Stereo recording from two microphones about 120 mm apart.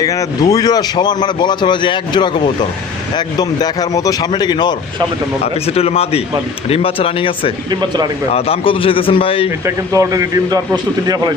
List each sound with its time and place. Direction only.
0.0 s a man's voice: 30° left (ahead or behind)
5.6 s a man's voice: 55° left (ahead or behind)
7.7 s speech: 35° right (ahead or behind)
8.3 s a man's voice: 55° left (ahead or behind)
9.6 s a man's voice: 25° right (ahead or behind)